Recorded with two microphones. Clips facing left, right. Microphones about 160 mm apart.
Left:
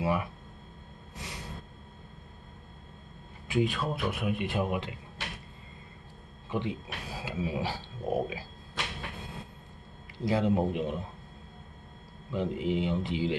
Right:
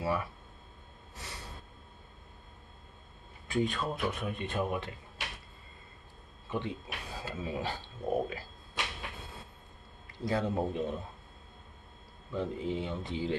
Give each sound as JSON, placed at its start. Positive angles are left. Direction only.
{"t": 0.0, "sound": "speech", "side_deg": 15}
{"t": 1.1, "sound": "a sound", "side_deg": 15}
{"t": 3.4, "sound": "a man's voice", "side_deg": 5}
{"t": 6.5, "sound": "speech", "side_deg": 15}
{"t": 10.2, "sound": "speech", "side_deg": 15}
{"t": 12.3, "sound": "speech", "side_deg": 15}